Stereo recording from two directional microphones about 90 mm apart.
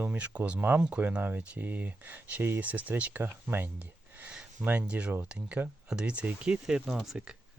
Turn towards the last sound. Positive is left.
turn(degrees=-5)  # may be behind; listen again after turning